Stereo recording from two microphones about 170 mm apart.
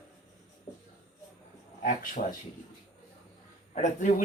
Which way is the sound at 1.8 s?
50° left (ahead or behind).